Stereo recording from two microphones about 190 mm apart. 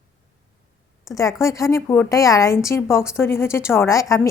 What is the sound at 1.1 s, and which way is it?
A woman's voice, 15° left (ahead or behind).